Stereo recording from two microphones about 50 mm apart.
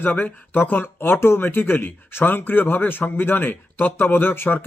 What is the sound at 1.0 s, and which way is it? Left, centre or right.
Speech, left.